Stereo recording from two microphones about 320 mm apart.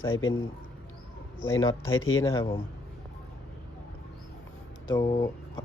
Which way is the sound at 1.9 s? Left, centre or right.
Left.